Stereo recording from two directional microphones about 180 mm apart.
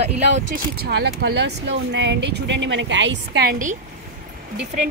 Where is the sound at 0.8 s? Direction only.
65° right (ahead or behind).